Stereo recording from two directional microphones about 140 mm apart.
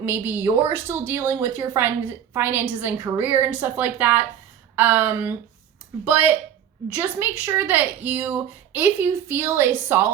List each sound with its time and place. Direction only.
0.0 s a woman's voice: 15° right (ahead or behind)